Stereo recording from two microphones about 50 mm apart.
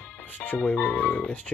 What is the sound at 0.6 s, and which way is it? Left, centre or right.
Speech, left.